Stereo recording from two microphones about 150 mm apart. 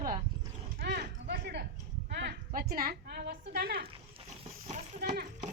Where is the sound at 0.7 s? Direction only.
90° right.